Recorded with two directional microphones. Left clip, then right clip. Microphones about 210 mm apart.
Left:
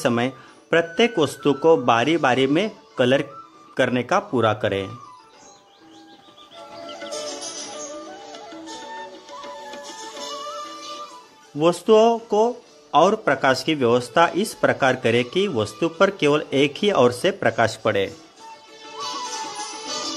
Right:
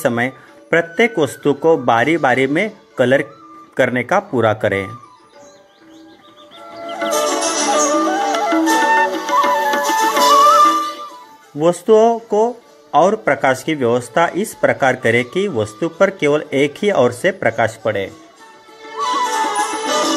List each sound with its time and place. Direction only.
0.0 s speech: centre (ahead or behind)
6.9 s music: 45° right (ahead or behind)
11.5 s speech: centre (ahead or behind)
18.9 s music: 35° right (ahead or behind)